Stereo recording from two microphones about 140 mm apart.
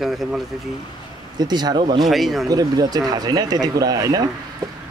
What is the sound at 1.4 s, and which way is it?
Speech, 30° right (ahead or behind).